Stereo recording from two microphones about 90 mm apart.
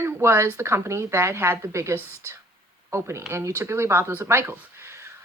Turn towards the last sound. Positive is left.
turn(degrees=-30)  # may be behind; listen again after turning